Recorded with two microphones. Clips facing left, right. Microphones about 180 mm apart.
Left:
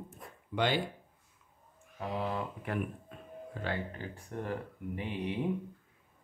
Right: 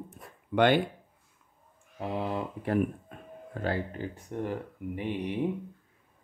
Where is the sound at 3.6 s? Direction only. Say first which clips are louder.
Right 7 dB; 50° right (ahead or behind).